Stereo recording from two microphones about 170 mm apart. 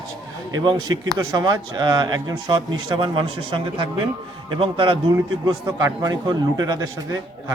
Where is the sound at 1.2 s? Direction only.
20° right (ahead or behind).